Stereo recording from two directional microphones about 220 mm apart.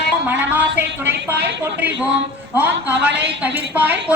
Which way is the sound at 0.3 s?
10° right (ahead or behind).